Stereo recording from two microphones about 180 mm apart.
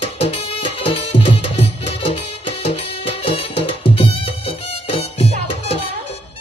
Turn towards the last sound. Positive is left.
turn(degrees=30)  # may be behind; listen again after turning